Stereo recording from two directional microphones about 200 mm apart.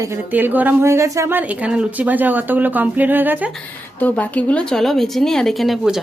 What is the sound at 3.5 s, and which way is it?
A woman's voice, 5° left (ahead or behind).